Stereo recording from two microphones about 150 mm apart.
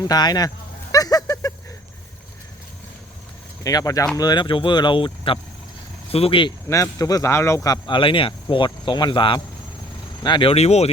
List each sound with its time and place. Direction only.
0.1 s a sound: 25° left (ahead or behind)
3.6 s speech: 25° left (ahead or behind); by 6.5 s 40° left (ahead or behind)
6.7 s speech: 20° left (ahead or behind)
10.5 s speech: 45° left (ahead or behind)